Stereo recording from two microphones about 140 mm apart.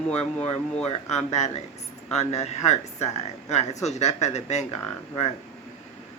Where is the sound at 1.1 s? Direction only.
55° left (ahead or behind).